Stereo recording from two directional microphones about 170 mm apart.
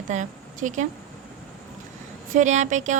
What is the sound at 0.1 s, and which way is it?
Speech, 45° right (ahead or behind).